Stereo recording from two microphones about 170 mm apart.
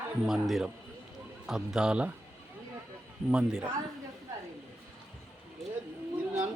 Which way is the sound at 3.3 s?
5° right (ahead or behind).